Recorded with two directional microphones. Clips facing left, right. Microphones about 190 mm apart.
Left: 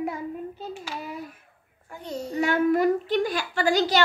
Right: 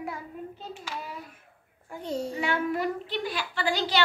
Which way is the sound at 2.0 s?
30° right (ahead or behind).